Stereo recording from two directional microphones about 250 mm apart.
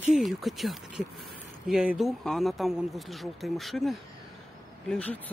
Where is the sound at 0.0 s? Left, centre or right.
Centre.